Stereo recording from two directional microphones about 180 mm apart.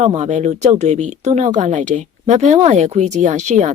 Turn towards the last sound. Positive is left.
turn(degrees=-40)  # may be behind; listen again after turning